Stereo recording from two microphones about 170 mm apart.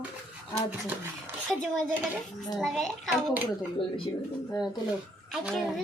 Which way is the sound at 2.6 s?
Centre (ahead or behind).